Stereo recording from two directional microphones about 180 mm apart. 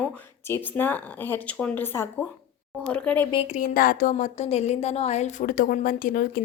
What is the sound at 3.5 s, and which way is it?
A woman's voice, 50° left (ahead or behind).